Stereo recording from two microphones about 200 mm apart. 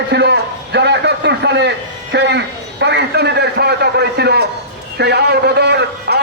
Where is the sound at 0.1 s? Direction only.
55° right (ahead or behind).